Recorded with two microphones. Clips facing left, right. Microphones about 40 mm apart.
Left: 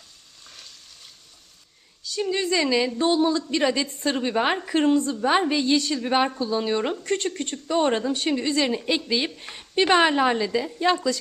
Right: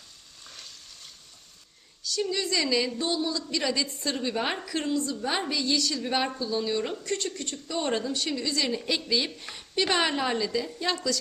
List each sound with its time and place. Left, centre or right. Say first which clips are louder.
0.4 s frying: even; centre
2.0 s a woman's voice: left 4 dB; left
3.0 s a woman's voice: left 8 dB; left